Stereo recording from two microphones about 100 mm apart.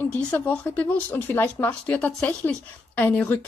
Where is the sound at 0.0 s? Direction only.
15° left (ahead or behind).